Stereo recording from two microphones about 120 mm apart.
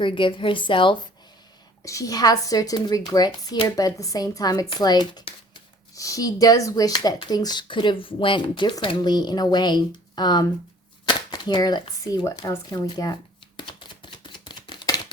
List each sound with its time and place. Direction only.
0.0 s a woman's voice: 45° left (ahead or behind)
1.8 s speech: 25° left (ahead or behind)
13.6 s a sound: 40° left (ahead or behind)